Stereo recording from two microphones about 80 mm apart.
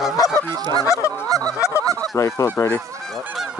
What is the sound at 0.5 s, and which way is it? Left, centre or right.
Goose, right.